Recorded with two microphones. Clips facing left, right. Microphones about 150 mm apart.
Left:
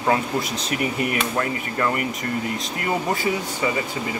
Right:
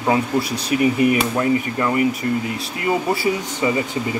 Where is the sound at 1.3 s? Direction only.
20° right (ahead or behind).